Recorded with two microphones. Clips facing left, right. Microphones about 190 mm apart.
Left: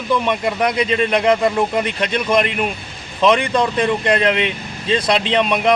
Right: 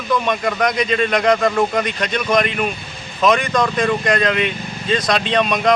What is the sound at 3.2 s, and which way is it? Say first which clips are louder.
Speech: left 1 dB; 30° left (ahead or behind).